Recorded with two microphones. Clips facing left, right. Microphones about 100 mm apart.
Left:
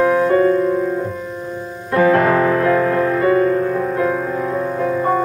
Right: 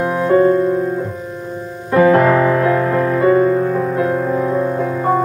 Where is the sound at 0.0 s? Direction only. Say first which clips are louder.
Even; 15° right (ahead or behind).